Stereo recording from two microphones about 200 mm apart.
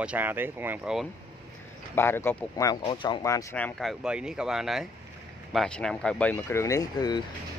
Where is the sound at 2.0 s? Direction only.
10° left (ahead or behind).